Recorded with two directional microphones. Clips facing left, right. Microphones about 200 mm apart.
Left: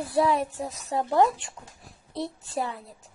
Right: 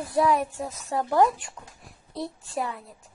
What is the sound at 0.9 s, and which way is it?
A child's voice, 25° left (ahead or behind).